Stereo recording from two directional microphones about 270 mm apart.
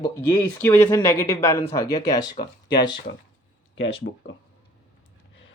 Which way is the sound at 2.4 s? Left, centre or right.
Left.